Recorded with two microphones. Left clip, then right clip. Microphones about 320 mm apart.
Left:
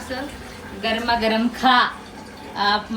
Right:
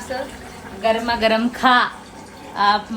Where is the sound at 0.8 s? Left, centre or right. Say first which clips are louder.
Right 3 dB; right.